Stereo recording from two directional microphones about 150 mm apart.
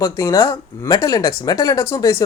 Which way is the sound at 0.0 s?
20° left (ahead or behind).